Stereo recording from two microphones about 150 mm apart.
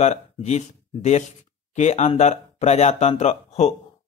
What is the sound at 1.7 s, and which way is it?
Speech, 50° left (ahead or behind).